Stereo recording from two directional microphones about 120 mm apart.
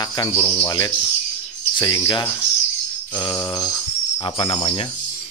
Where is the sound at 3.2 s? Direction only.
35° left (ahead or behind).